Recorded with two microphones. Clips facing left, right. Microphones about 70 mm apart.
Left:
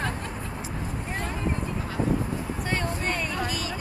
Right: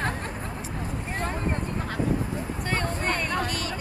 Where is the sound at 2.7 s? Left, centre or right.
Centre.